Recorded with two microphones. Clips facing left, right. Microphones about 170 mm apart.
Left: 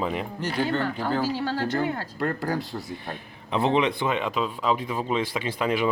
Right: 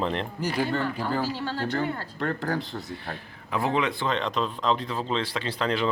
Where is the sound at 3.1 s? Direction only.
20° left (ahead or behind).